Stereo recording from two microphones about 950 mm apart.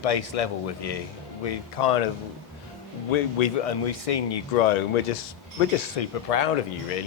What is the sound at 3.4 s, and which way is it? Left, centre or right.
A man's voice, left.